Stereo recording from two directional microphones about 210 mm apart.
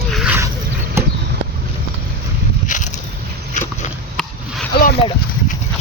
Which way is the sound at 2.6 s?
35° left (ahead or behind).